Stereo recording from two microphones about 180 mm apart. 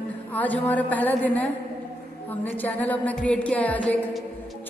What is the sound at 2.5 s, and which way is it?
Music, 10° left (ahead or behind).